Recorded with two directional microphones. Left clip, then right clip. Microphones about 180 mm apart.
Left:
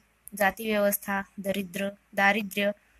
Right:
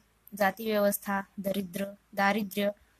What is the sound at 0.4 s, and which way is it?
Speech, 15° right (ahead or behind).